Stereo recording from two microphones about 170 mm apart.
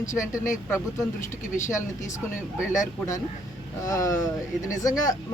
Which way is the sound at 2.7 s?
20° left (ahead or behind).